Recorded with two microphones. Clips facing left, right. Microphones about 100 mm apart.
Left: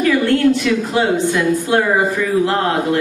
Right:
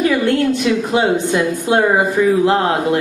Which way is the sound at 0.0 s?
20° right (ahead or behind).